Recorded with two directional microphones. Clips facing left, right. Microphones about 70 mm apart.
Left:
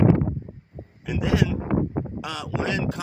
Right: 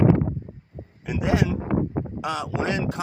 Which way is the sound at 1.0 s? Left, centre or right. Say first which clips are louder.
Even; right.